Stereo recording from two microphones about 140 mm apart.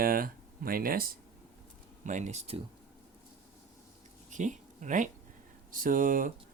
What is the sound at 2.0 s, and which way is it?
Speech, 60° right (ahead or behind).